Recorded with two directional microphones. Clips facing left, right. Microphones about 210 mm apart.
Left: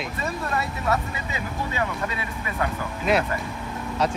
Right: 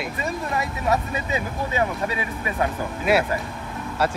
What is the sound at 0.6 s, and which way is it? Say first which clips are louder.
Speech: right 3 dB; 15° right (ahead or behind).